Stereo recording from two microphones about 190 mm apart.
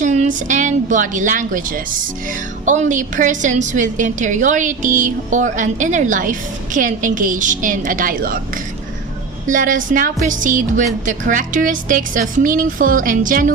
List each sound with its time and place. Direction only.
0.0 s a woman's voice: 40° right (ahead or behind)
9.5 s a woman's voice: 45° right (ahead or behind)